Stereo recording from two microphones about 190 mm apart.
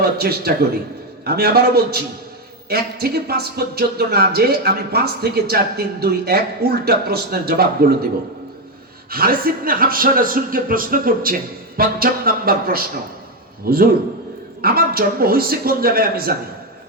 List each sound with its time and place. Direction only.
0.0 s a man's voice: 55° right (ahead or behind)
9.0 s speech: 50° right (ahead or behind)